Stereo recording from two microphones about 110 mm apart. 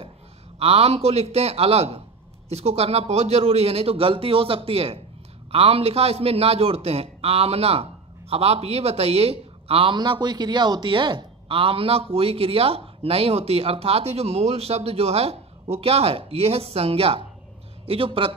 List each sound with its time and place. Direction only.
0.6 s a man's voice: 65° right (ahead or behind)
9.9 s speech: 45° right (ahead or behind)